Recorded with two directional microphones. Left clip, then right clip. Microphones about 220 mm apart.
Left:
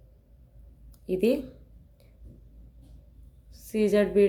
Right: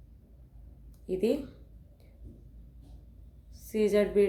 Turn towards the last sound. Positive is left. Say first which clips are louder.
# left 2 dB
turn(degrees=20)  # may be behind; listen again after turning